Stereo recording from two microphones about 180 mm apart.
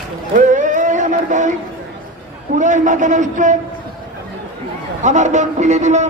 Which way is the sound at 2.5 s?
45° right (ahead or behind).